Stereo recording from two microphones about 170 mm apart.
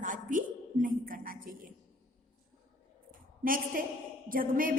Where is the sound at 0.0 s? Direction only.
50° right (ahead or behind).